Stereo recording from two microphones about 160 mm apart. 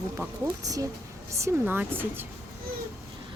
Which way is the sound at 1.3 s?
20° right (ahead or behind).